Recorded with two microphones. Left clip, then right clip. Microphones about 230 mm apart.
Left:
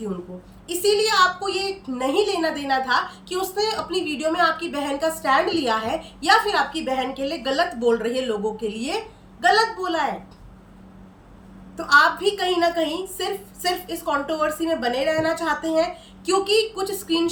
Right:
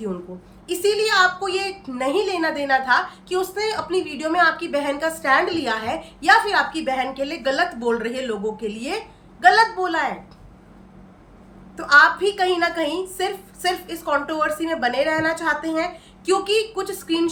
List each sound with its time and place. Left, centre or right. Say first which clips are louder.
0.7 s a woman's voice: right 1 dB; centre
11.9 s a woman's voice: right 2 dB; centre